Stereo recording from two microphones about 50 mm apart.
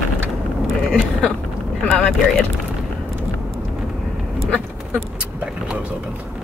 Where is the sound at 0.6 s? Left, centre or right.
Centre.